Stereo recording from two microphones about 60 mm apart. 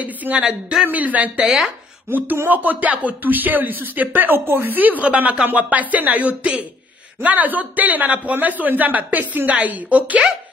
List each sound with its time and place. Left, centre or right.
0.0 s speech: right
0.8 s speech: right
1.4 s speech: centre
2.0 s speech: right